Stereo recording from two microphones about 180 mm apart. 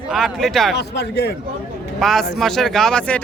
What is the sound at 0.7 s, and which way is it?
Speech, 70° left (ahead or behind).